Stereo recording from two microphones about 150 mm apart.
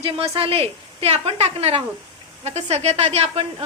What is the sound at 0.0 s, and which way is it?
A woman's voice, 40° right (ahead or behind).